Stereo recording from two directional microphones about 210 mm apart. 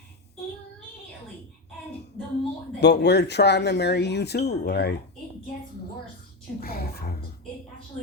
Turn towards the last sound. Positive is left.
turn(degrees=45)  # may be behind; listen again after turning